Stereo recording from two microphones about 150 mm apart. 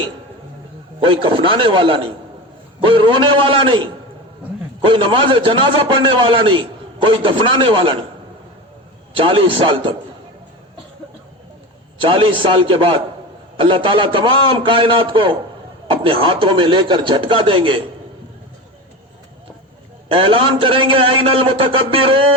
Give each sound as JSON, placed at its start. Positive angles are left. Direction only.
{"t": 0.9, "sound": "a man's voice", "side_deg": -35}
{"t": 4.9, "sound": "a man's voice", "side_deg": -35}
{"t": 9.1, "sound": "a man's voice", "side_deg": -35}
{"t": 11.9, "sound": "a man's voice", "side_deg": -35}
{"t": 20.1, "sound": "a man's voice", "side_deg": -35}